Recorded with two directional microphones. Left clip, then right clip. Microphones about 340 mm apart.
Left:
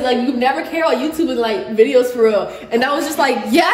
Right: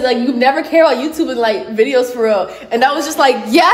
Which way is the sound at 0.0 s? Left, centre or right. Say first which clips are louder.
Right 3 dB; centre.